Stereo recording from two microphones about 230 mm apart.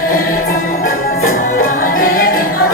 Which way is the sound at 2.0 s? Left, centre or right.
Left.